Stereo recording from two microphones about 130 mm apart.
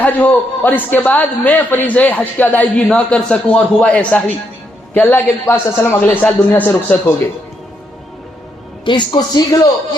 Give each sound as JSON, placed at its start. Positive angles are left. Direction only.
{"t": 0.0, "sound": "a man's voice", "side_deg": 15}
{"t": 8.8, "sound": "speech", "side_deg": 35}